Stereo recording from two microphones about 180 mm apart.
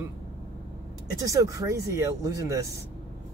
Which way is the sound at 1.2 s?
20° right (ahead or behind).